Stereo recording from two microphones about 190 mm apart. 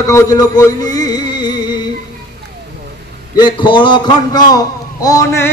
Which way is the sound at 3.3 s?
25° left (ahead or behind).